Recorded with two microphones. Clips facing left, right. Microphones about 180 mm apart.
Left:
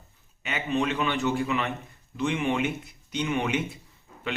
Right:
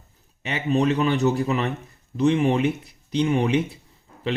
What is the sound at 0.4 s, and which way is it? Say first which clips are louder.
Speech: right 6 dB; 35° right (ahead or behind).